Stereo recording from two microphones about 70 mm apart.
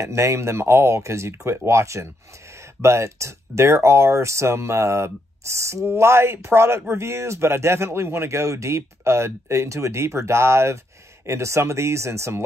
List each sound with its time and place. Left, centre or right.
0.0 s speech: right